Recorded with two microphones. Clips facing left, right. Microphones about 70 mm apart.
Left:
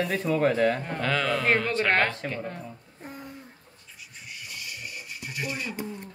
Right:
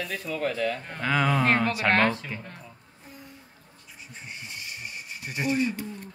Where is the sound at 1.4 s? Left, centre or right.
Centre.